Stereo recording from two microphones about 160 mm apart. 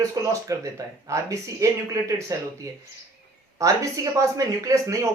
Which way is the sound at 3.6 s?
20° right (ahead or behind).